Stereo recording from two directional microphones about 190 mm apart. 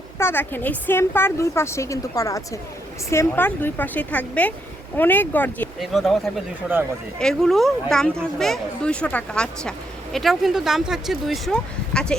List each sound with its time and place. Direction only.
0.2 s a woman's voice: 10° left (ahead or behind)
7.2 s speech: 5° left (ahead or behind)